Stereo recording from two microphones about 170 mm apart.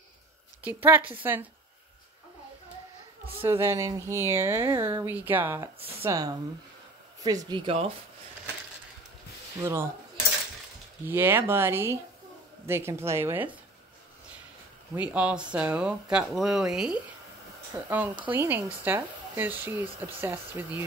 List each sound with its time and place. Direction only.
0.7 s speech: 10° right (ahead or behind)
3.4 s speech: 15° right (ahead or behind); by 7.9 s 30° right (ahead or behind)
9.6 s speech: 15° right (ahead or behind)
11.1 s speech: 10° right (ahead or behind)
15.0 s speech: 10° right (ahead or behind)